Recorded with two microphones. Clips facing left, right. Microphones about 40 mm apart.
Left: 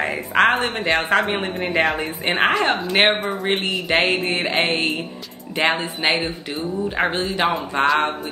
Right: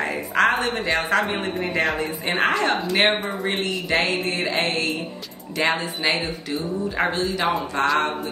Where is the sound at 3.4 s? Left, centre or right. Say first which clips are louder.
Left 3 dB; left.